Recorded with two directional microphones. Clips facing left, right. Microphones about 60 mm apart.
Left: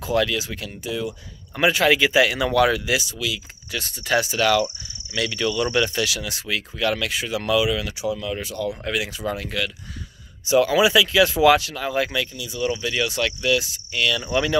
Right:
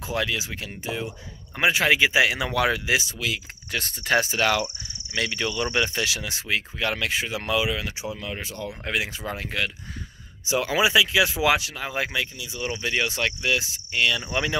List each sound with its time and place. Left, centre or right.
0.0 s speech: right